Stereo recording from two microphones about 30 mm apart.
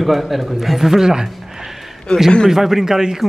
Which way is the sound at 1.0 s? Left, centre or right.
Centre.